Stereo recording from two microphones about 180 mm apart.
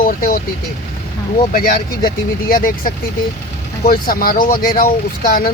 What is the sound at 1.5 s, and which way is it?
Speech, 55° left (ahead or behind).